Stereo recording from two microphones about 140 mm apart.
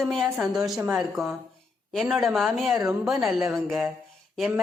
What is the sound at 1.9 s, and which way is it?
A woman's voice, centre (ahead or behind).